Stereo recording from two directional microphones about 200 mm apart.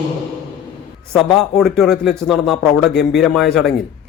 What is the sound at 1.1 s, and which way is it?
A man's voice, centre (ahead or behind).